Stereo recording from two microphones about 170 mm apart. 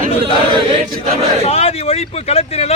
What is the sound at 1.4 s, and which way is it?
Speech, 35° left (ahead or behind).